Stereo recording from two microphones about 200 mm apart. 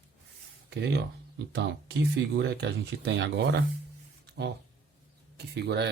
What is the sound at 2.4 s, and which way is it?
Speech, 55° right (ahead or behind).